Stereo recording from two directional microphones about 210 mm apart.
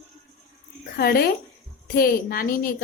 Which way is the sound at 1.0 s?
45° left (ahead or behind).